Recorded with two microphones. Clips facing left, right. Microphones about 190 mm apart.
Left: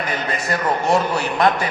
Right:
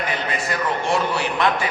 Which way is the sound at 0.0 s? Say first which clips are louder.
Left 1 dB; 40° left (ahead or behind).